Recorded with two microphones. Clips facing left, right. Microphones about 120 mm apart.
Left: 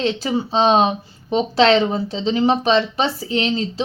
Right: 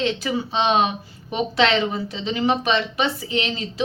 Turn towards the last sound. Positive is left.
turn(degrees=35)  # may be behind; listen again after turning